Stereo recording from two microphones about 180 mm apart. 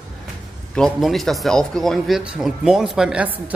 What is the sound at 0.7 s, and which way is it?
A woman's voice, centre (ahead or behind).